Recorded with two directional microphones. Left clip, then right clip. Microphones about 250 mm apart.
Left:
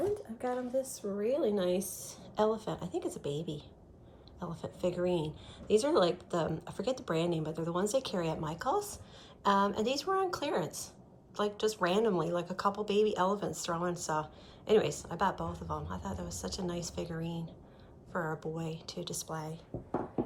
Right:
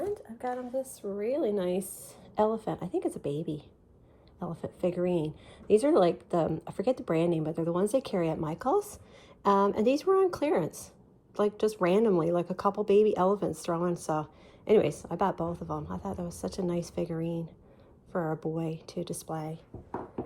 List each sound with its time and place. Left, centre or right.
0.4 s speech: centre